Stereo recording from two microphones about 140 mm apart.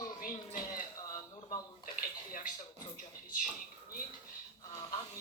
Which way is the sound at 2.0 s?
85° left.